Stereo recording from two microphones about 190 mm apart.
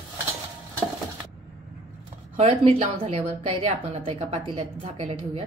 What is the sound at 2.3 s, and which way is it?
A woman's voice, 30° right (ahead or behind).